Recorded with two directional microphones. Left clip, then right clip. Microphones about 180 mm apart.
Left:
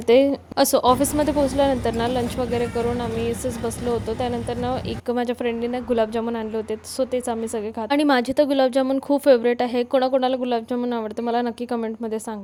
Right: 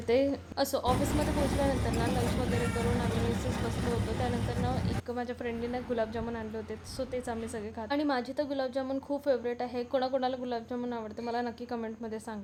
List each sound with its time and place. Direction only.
0.1 s a woman's voice: 40° left (ahead or behind)
0.9 s speech: centre (ahead or behind)
4.6 s speech: 45° left (ahead or behind)